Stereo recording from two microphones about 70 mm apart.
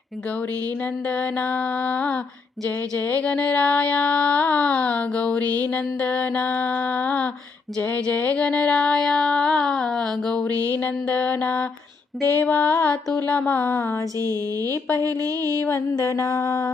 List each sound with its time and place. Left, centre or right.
1.0 s music: left
8.0 s a sound: left
10.7 s music: left
13.2 s speech: left
14.2 s speech: right
16.0 s mantra: left